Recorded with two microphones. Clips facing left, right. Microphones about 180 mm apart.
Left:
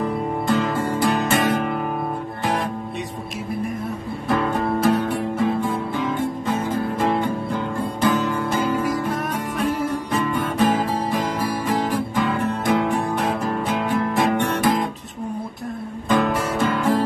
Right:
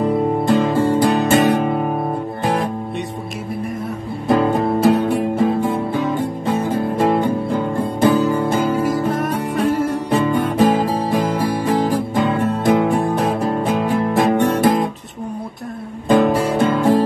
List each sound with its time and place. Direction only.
0.5 s music: 30° right (ahead or behind)
4.3 s music: 30° right (ahead or behind)
6.4 s music: 35° right (ahead or behind)
8.8 s music: centre (ahead or behind)
10.1 s music: 30° right (ahead or behind)
16.1 s music: 30° right (ahead or behind)